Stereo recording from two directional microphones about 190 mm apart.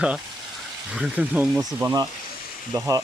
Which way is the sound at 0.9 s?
5° right (ahead or behind).